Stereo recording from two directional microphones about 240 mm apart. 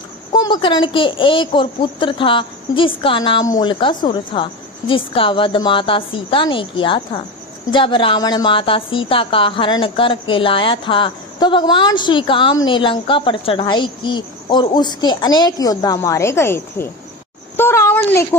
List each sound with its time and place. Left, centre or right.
0.3 s a woman's voice: centre